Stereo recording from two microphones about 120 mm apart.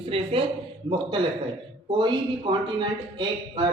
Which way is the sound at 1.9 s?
40° right (ahead or behind).